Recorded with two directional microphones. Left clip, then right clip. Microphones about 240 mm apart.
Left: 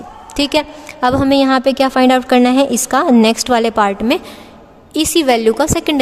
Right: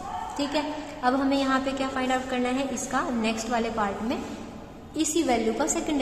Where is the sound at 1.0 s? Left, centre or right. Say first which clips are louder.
Left 12 dB; left.